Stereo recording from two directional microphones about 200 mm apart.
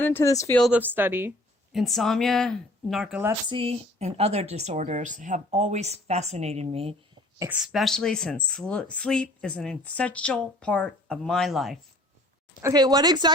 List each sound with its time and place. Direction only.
0.0 s speech: 10° left (ahead or behind)
0.7 s speech: 10° right (ahead or behind)
1.7 s speech: centre (ahead or behind)
3.5 s speech: 30° right (ahead or behind)
7.3 s speech: 10° right (ahead or behind)
12.6 s speech: 20° right (ahead or behind)